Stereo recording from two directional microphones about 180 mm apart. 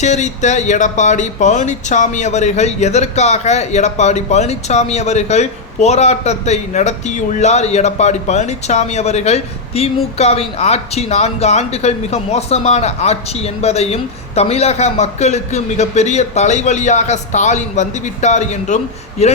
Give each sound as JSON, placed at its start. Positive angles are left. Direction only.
{"t": 0.0, "sound": "speech", "side_deg": 40}